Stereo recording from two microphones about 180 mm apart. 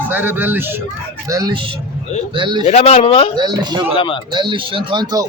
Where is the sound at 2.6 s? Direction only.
35° left (ahead or behind).